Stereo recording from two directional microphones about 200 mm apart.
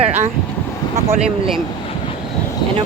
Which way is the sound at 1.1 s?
5° right (ahead or behind).